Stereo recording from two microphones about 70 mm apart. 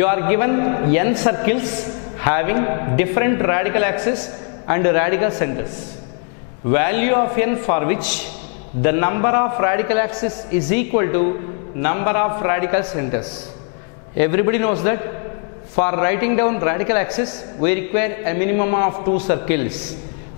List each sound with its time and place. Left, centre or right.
0.0 s a man's voice: centre
6.7 s a man's voice: centre